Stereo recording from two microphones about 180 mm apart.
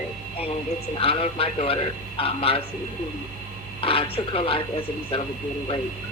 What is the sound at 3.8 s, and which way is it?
A man's voice, 30° left (ahead or behind).